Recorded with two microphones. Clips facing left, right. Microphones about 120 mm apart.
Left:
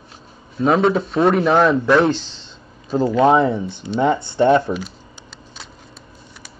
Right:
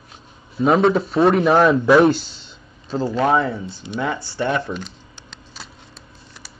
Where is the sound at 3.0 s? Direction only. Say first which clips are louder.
Left 4 dB; 20° left (ahead or behind).